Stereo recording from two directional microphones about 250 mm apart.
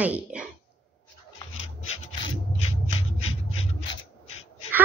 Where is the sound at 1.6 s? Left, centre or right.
Left.